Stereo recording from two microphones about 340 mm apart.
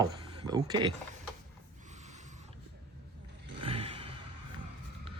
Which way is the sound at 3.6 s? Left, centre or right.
Centre.